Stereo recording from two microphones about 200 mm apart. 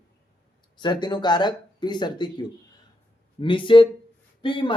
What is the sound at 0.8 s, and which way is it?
A man's voice, 20° left (ahead or behind).